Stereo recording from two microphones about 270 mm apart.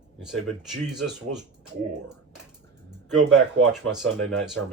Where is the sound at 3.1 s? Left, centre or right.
Centre.